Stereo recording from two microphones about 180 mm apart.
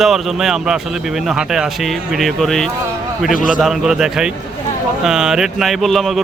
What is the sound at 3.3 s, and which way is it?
Speech, 50° left (ahead or behind).